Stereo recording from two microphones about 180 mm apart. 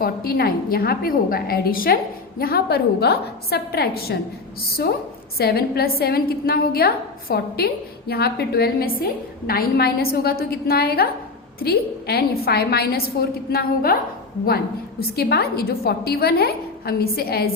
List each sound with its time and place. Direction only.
0.0 s a woman's voice: 55° left (ahead or behind)
5.4 s a woman's voice: 60° left (ahead or behind)
15.1 s a woman's voice: 60° left (ahead or behind)